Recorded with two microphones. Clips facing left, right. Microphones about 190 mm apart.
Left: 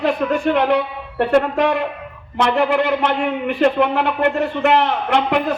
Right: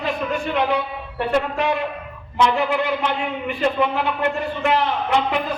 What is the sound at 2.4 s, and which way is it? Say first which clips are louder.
A man's voice: left 3 dB; 60° left (ahead or behind).